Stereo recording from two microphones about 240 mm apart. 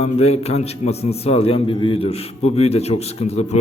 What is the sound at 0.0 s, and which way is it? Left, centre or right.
A man's voice, left.